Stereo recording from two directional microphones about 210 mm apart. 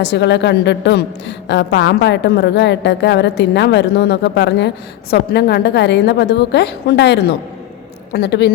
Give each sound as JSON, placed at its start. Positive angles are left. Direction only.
{"t": 0.0, "sound": "a woman's voice", "side_deg": 55}